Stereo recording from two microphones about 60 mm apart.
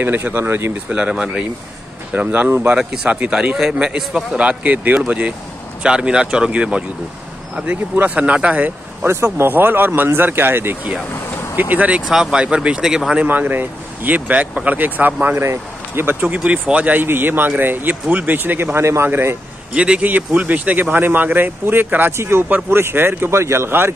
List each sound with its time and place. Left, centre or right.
0.0 s speech: right
0.8 s speech: centre
2.1 s speech: right
2.8 s speech: centre
9.0 s speech: right
11.5 s speech: right
12.1 s speech: centre
13.2 s speech: right
15.4 s speech: right
16.3 s speech: centre; by 19.3 s right
19.7 s speech: centre; by 22.1 s right
22.1 s speech: right